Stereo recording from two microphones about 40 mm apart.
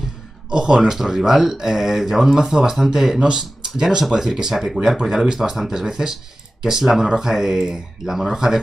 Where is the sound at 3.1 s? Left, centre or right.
Right.